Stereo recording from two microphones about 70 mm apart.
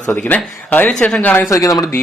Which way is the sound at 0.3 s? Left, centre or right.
Left.